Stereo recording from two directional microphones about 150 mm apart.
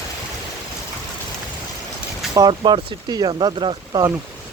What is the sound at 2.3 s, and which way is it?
Speech, 30° right (ahead or behind).